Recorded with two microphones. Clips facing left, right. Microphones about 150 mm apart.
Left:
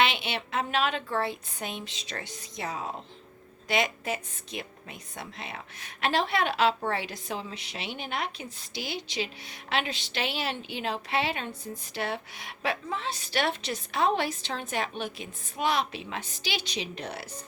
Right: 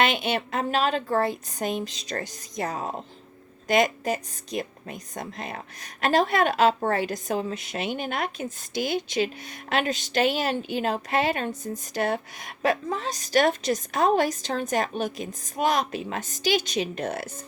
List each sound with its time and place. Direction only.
0.0 s a woman's voice: 45° right (ahead or behind)